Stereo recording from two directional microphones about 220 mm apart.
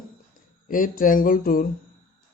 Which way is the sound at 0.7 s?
40° left (ahead or behind).